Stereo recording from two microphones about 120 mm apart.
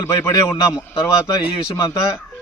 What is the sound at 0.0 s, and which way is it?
Speech, 25° left (ahead or behind).